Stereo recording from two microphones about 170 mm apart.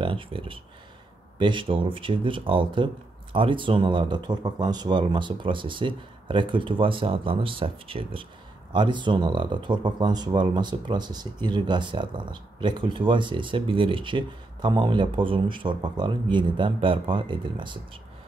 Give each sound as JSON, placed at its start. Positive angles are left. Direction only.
{"t": 0.0, "sound": "speech", "side_deg": -30}